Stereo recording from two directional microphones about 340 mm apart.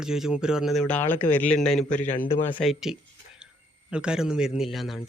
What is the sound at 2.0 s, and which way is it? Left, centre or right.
Speech, left.